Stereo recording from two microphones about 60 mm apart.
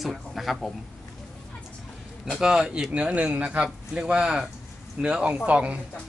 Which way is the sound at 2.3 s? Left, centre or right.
Centre.